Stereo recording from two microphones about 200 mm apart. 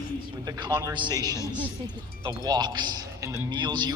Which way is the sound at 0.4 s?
20° right (ahead or behind).